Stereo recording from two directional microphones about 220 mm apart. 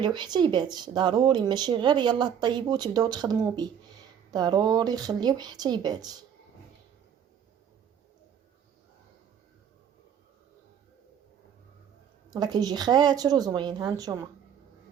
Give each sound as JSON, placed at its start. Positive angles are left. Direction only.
{"t": 0.0, "sound": "speech", "side_deg": -20}
{"t": 12.3, "sound": "speech", "side_deg": -20}